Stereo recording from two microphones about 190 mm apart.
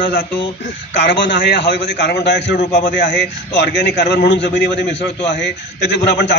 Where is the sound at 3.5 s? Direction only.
65° left (ahead or behind).